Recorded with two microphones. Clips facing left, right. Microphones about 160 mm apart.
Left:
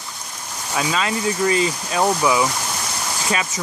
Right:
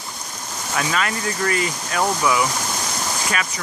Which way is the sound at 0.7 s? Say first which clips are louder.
Left 2 dB; 20° left (ahead or behind).